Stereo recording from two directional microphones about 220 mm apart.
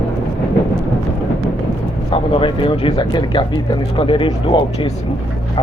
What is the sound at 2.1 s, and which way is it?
Speech, 25° left (ahead or behind).